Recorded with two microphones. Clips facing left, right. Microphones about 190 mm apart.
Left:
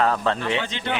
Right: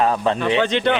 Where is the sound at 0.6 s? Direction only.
70° right (ahead or behind).